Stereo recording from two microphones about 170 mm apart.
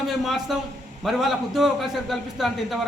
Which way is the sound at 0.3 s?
Centre (ahead or behind).